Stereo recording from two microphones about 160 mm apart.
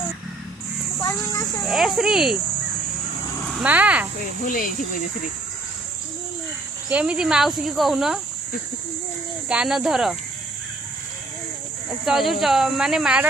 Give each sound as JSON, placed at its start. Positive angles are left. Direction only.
{"t": 1.6, "sound": "speech", "side_deg": 0}
{"t": 3.5, "sound": "speech", "side_deg": -10}
{"t": 4.5, "sound": "speech", "side_deg": 60}
{"t": 6.9, "sound": "speech", "side_deg": -10}
{"t": 9.5, "sound": "speech", "side_deg": -5}
{"t": 12.0, "sound": "speech", "side_deg": 0}